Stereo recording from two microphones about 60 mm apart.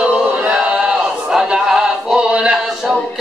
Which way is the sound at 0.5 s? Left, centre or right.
Centre.